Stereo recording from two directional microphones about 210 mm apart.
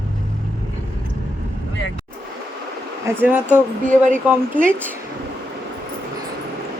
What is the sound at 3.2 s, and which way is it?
Speech, 10° right (ahead or behind).